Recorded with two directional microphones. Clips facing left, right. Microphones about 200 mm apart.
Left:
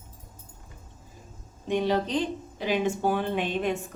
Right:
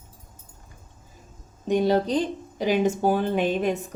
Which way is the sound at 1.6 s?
40° right (ahead or behind).